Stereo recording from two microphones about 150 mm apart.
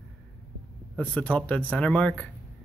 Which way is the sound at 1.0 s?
10° left (ahead or behind).